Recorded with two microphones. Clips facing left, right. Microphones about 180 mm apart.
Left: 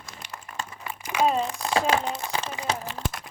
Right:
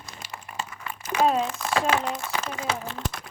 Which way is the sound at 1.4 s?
30° left (ahead or behind).